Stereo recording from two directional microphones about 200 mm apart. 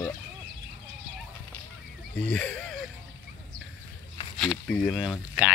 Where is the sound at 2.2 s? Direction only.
5° left (ahead or behind).